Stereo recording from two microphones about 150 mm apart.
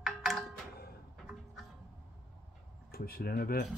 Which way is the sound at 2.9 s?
85° left.